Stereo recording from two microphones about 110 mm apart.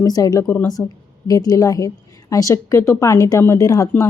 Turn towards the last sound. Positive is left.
turn(degrees=30)  # may be behind; listen again after turning